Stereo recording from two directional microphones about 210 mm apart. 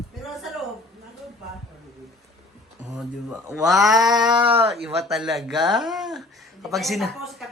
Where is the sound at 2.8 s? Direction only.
5° right (ahead or behind).